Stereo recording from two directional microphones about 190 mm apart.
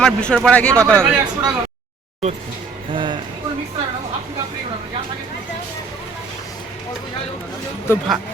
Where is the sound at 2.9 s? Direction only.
25° right (ahead or behind).